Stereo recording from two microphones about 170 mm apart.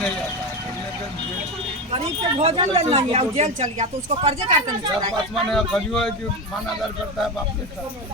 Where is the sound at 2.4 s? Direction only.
40° right (ahead or behind).